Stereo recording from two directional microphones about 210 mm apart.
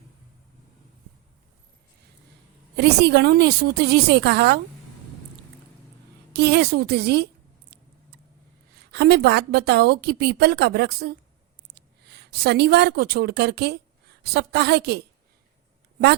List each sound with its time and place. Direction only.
2.7 s a woman's voice: 50° right (ahead or behind)
6.3 s a woman's voice: 50° right (ahead or behind)
8.9 s a woman's voice: 50° right (ahead or behind)